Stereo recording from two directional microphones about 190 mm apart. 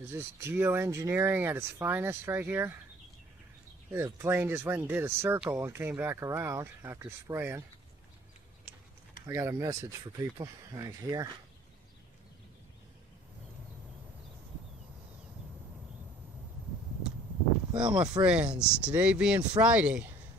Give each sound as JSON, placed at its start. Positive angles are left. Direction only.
{"t": 0.0, "sound": "speech", "side_deg": -15}
{"t": 3.9, "sound": "speech", "side_deg": -15}
{"t": 9.3, "sound": "speech", "side_deg": -15}
{"t": 17.7, "sound": "speech", "side_deg": -5}